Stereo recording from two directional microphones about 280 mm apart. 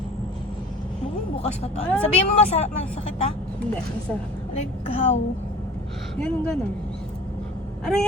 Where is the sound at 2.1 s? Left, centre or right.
Left.